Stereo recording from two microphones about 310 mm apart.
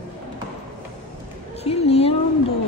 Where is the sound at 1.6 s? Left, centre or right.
Centre.